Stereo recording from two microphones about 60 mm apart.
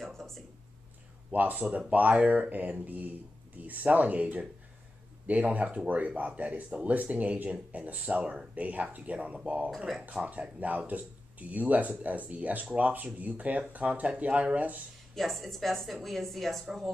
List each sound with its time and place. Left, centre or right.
0.0 s a sound: centre
1.3 s speech: right
15.1 s speech: centre